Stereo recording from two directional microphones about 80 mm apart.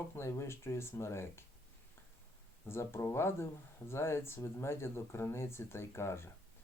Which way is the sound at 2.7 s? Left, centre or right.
Left.